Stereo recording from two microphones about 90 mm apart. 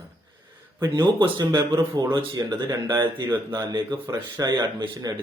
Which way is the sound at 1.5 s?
30° right (ahead or behind).